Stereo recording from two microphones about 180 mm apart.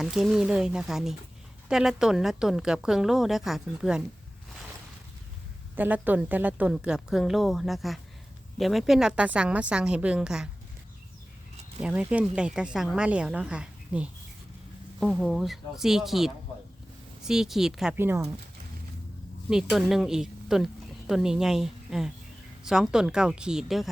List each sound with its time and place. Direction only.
0.0 s a woman's voice: centre (ahead or behind)
5.7 s a woman's voice: 10° right (ahead or behind)
11.8 s a woman's voice: 5° right (ahead or behind)
19.5 s a woman's voice: centre (ahead or behind)